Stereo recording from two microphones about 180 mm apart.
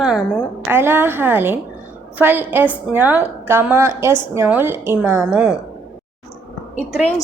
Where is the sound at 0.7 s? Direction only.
10° right (ahead or behind).